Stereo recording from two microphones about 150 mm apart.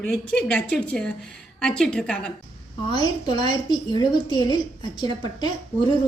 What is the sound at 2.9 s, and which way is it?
A woman's voice, 30° left (ahead or behind).